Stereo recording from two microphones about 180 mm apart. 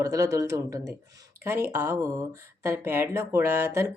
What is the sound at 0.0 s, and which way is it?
Speech, 20° right (ahead or behind).